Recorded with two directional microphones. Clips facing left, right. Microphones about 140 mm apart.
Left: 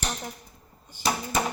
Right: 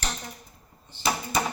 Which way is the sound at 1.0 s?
10° left (ahead or behind).